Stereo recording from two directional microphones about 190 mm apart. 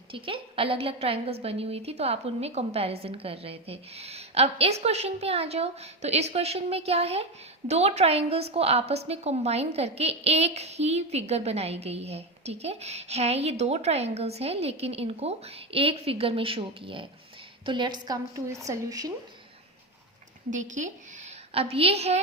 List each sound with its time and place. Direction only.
0.1 s a woman's voice: 30° right (ahead or behind)
20.5 s a woman's voice: 40° right (ahead or behind)